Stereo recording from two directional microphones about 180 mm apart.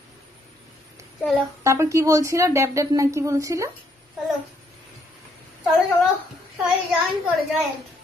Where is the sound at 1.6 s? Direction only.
15° right (ahead or behind).